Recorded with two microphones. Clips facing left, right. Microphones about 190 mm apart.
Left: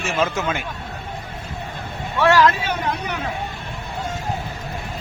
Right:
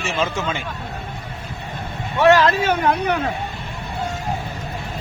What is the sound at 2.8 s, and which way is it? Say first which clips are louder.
Speech: right 6 dB; 60° right (ahead or behind).